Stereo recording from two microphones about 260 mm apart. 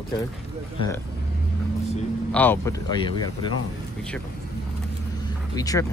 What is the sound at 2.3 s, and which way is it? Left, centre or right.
Speech, centre.